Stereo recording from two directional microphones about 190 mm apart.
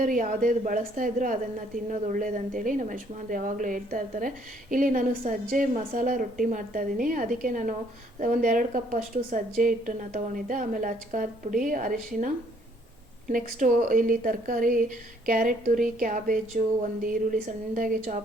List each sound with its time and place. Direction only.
0.0 s a woman's voice: 45° right (ahead or behind)